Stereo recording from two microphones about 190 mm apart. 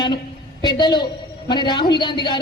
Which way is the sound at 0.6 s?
20° left (ahead or behind).